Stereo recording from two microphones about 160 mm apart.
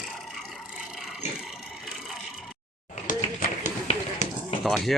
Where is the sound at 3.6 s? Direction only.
50° left (ahead or behind).